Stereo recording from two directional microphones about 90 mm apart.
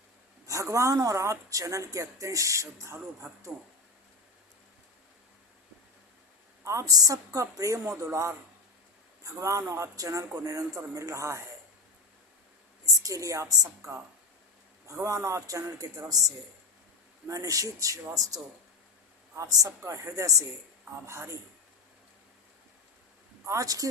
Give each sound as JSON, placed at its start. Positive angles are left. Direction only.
{"t": 0.4, "sound": "speech", "side_deg": -35}
{"t": 6.7, "sound": "speech", "side_deg": -40}
{"t": 12.8, "sound": "a woman's voice", "side_deg": -40}
{"t": 15.0, "sound": "speech", "side_deg": -35}
{"t": 19.4, "sound": "speech", "side_deg": -40}
{"t": 23.5, "sound": "speech", "side_deg": -40}